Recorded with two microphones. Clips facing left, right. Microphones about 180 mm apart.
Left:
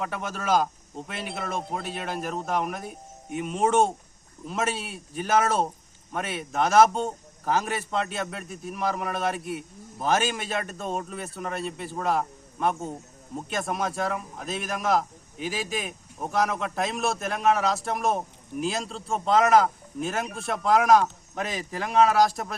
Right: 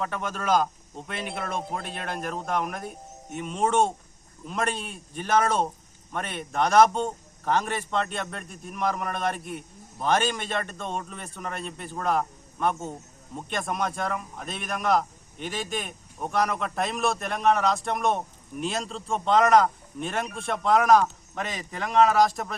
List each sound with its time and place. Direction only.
0.0 s a man's voice: 5° left (ahead or behind)